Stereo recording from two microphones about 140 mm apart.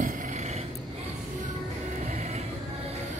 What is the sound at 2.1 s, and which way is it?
Music, 55° right (ahead or behind).